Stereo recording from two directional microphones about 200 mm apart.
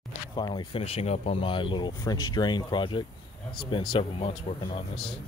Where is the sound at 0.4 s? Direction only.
20° left (ahead or behind).